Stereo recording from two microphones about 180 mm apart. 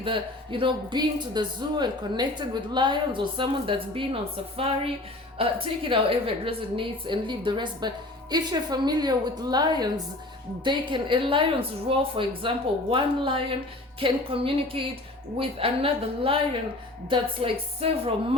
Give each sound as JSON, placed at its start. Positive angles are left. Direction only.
{"t": 0.0, "sound": "a woman's voice", "side_deg": -30}